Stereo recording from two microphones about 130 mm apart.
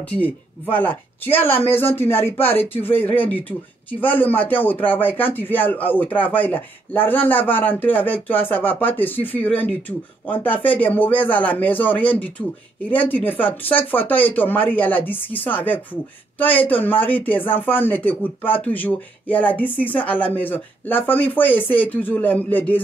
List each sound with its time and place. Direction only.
0.1 s speech: 15° left (ahead or behind)